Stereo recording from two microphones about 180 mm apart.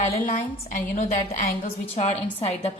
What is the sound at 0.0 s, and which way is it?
A woman's voice, 45° left (ahead or behind).